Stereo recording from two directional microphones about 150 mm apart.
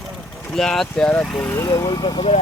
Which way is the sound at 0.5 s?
5° left (ahead or behind).